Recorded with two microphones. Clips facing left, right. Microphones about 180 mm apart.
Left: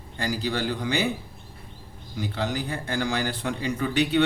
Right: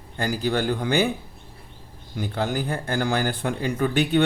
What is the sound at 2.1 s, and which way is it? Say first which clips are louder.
Speech: right 3 dB; 50° right (ahead or behind).